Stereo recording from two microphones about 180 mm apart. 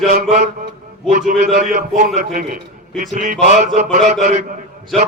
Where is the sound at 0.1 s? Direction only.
40° right (ahead or behind).